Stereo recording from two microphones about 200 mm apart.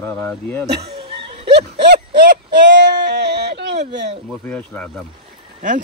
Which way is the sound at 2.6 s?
60° right (ahead or behind).